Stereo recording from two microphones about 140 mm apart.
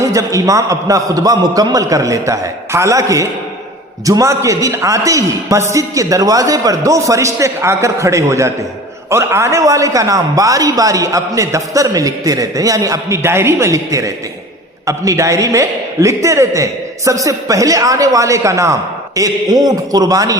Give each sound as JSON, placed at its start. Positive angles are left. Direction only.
{"t": 0.0, "sound": "a man's voice", "side_deg": -25}